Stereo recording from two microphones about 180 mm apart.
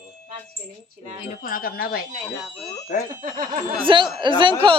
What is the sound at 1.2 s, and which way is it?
Speech, 55° left (ahead or behind).